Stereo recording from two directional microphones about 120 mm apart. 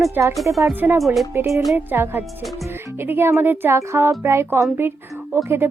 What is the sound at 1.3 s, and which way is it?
Speech, 20° right (ahead or behind).